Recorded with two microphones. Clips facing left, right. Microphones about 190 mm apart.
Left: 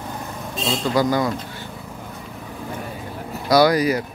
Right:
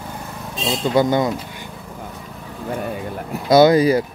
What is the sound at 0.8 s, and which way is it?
Speech, 25° right (ahead or behind).